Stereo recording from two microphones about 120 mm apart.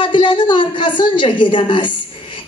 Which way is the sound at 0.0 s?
45° left (ahead or behind).